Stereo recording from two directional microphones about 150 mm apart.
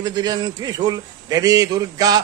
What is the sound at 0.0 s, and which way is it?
A man's voice, 25° right (ahead or behind).